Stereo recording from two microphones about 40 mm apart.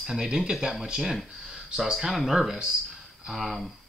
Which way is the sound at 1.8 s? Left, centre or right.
Centre.